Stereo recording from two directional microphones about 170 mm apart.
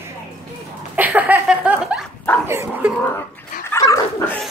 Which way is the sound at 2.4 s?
15° right (ahead or behind).